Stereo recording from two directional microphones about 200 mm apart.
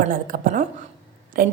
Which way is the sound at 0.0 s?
45° right (ahead or behind).